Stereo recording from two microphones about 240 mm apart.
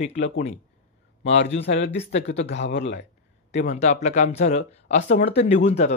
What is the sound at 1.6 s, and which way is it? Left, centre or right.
Speech, left.